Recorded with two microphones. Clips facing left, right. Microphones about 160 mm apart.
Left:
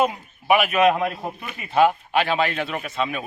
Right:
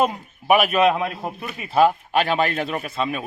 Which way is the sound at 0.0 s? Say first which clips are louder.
Right 1 dB; 40° right (ahead or behind).